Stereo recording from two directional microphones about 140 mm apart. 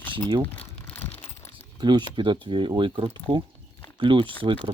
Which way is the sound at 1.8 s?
30° right (ahead or behind).